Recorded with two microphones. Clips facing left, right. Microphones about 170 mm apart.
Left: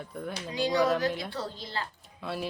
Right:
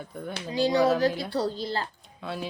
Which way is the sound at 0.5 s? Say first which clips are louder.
Right 4 dB; 30° right (ahead or behind).